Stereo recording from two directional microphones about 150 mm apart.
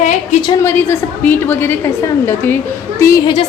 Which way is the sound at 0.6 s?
15° left (ahead or behind).